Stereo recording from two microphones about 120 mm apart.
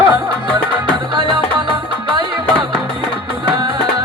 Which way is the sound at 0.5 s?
40° right (ahead or behind).